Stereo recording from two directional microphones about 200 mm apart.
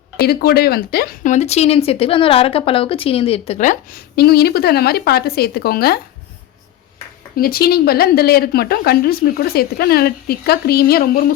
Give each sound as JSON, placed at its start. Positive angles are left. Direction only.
{"t": 0.2, "sound": "speech", "side_deg": 50}
{"t": 7.3, "sound": "speech", "side_deg": 50}